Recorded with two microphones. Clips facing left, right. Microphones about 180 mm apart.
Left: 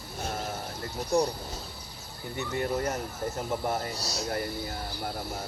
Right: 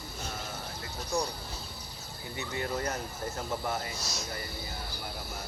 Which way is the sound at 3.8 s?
40° left (ahead or behind).